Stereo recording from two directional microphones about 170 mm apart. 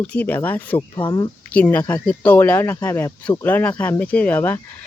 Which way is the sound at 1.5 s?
10° left (ahead or behind).